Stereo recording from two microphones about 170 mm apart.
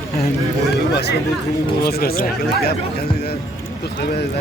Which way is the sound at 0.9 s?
70° left (ahead or behind).